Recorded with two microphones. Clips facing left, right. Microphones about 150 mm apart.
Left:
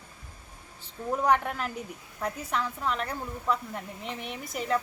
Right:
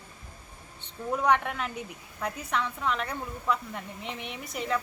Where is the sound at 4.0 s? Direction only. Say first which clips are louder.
Left 1 dB; centre (ahead or behind).